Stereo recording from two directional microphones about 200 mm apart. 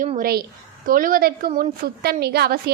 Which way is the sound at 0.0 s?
40° right (ahead or behind).